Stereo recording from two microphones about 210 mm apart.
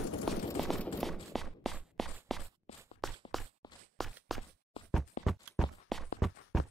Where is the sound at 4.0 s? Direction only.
Centre (ahead or behind).